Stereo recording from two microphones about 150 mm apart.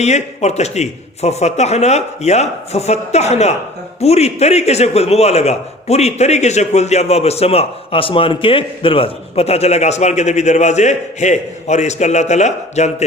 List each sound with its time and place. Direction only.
0.0 s a man's voice: 50° left (ahead or behind)